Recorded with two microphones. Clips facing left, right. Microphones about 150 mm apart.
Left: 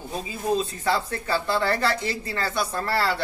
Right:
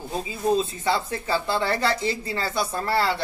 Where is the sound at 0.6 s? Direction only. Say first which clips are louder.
Right 1 dB; 25° right (ahead or behind).